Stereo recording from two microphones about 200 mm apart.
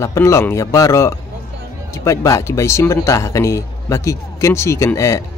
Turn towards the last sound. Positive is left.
turn(degrees=15)  # may be behind; listen again after turning